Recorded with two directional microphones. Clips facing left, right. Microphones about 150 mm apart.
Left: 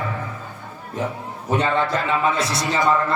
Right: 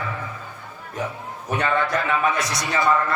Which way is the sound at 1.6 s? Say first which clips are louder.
Left 1 dB; 25° left (ahead or behind).